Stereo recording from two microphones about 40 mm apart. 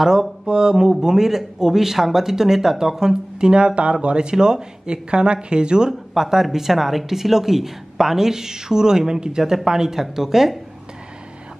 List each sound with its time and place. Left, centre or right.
0.0 s speech: centre
5.9 s speech: centre